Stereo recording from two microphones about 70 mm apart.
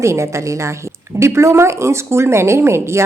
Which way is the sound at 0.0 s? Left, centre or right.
Right.